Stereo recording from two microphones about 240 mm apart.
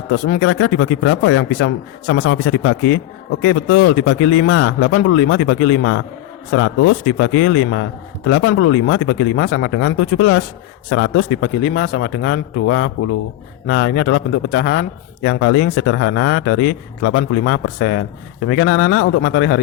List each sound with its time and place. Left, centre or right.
0.3 s a man's voice: left